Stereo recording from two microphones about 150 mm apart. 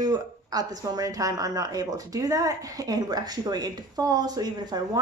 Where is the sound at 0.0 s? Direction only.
25° right (ahead or behind).